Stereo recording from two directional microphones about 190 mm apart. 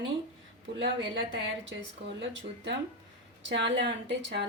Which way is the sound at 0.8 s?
75° right (ahead or behind).